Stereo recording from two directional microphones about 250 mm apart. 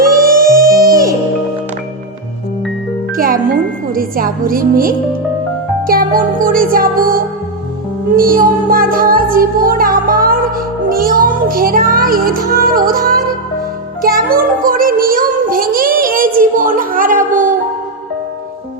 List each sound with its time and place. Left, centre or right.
0.5 s music: right
0.8 s music: centre
3.9 s music: right